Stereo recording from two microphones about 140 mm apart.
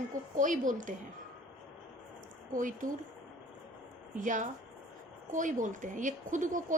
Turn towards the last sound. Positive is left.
turn(degrees=-65)  # may be behind; listen again after turning